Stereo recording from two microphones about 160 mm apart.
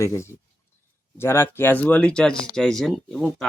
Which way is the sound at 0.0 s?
20° left (ahead or behind).